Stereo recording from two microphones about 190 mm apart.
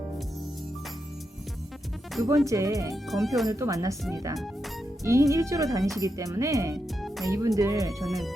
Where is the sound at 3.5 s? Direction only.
15° right (ahead or behind).